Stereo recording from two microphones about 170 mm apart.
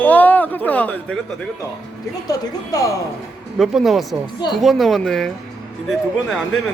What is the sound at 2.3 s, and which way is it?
Speech, 20° left (ahead or behind).